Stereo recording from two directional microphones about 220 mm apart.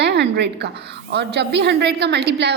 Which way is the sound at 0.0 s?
50° right (ahead or behind).